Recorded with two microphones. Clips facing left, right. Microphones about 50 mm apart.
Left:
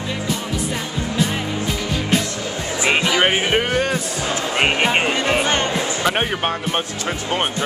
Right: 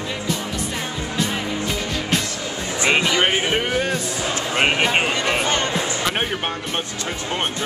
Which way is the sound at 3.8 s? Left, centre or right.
Centre.